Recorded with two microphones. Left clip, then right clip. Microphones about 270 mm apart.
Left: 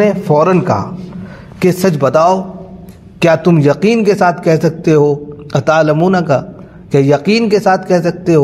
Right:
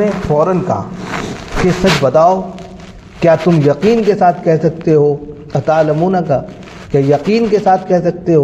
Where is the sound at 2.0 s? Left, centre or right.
Left.